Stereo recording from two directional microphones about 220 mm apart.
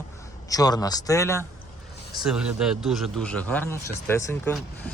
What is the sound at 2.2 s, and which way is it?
Speech, 5° right (ahead or behind).